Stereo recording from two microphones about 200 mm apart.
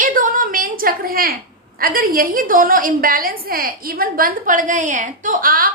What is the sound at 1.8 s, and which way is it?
A woman's voice, 45° right (ahead or behind).